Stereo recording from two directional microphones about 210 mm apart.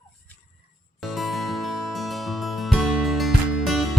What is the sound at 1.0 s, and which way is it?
Music, centre (ahead or behind).